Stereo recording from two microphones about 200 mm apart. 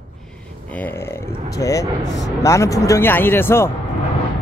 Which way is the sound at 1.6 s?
15° left (ahead or behind).